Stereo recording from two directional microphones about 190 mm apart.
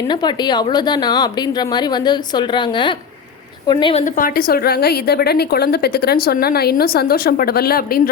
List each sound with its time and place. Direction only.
0.1 s a woman's voice: 25° left (ahead or behind)
4.0 s a woman's voice: 45° left (ahead or behind)